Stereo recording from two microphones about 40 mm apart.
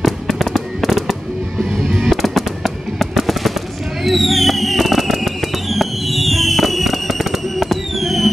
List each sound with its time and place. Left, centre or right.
0.0 s fireworks: centre
2.2 s fireworks: centre